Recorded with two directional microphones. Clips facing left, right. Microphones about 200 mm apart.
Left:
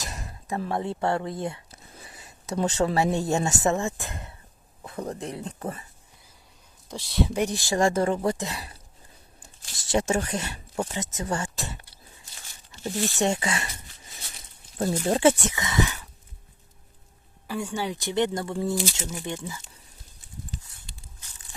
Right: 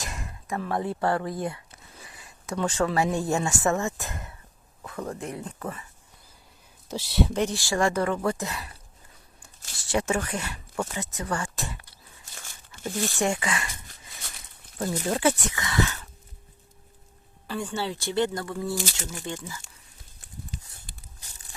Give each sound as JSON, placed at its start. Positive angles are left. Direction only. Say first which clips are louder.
{"t": 0.1, "sound": "speech", "louder": "left 2 dB", "side_deg": 35}
{"t": 3.8, "sound": "speech", "louder": "even", "side_deg": 30}
{"t": 6.8, "sound": "speech", "louder": "right 1 dB", "side_deg": -5}
{"t": 7.3, "sound": "speech", "louder": "left 1 dB", "side_deg": 15}
{"t": 9.9, "sound": "speech", "louder": "left 2 dB", "side_deg": 25}
{"t": 12.3, "sound": "tearing", "louder": "right 6 dB", "side_deg": -50}
{"t": 13.1, "sound": "speech", "louder": "left 1 dB", "side_deg": 25}
{"t": 14.2, "sound": "a sound", "louder": "right 2 dB", "side_deg": -55}
{"t": 15.0, "sound": "speech", "louder": "left 4 dB", "side_deg": 25}
{"t": 17.4, "sound": "speech", "louder": "left 1 dB", "side_deg": 10}